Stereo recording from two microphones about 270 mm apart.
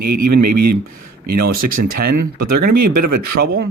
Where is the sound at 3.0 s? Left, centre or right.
Right.